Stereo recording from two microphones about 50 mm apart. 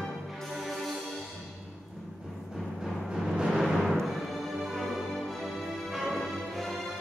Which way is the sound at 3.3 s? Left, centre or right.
Centre.